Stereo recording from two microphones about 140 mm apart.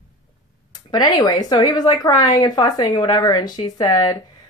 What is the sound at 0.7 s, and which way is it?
Speech, 30° left (ahead or behind).